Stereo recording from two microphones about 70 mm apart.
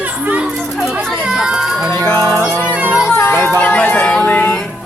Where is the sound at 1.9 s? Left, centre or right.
Left.